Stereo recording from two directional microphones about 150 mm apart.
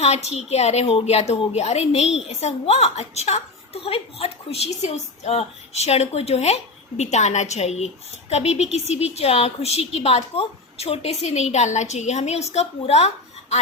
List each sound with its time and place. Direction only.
0.0 s a woman's voice: 45° left (ahead or behind)